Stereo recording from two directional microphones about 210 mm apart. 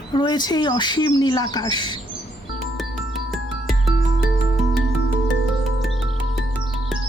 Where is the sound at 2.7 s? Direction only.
Centre (ahead or behind).